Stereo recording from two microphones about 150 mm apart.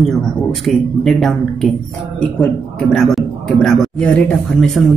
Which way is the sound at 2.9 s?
5° left (ahead or behind).